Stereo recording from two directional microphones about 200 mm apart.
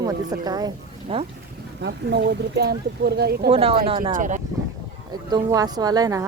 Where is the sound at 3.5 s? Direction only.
30° right (ahead or behind).